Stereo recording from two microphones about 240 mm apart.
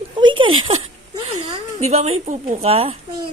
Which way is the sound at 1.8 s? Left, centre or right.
Right.